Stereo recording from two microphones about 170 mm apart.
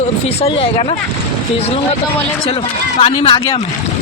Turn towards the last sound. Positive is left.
turn(degrees=30)  # may be behind; listen again after turning